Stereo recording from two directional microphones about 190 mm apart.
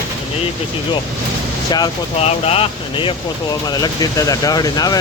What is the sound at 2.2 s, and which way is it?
Speech, 30° left (ahead or behind).